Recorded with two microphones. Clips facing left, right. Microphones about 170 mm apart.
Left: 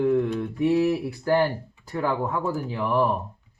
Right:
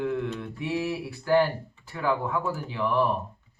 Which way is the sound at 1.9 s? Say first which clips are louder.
Left 2 dB; 40° left (ahead or behind).